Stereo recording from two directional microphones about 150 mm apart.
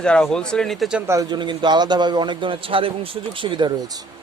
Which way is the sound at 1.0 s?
20° right (ahead or behind).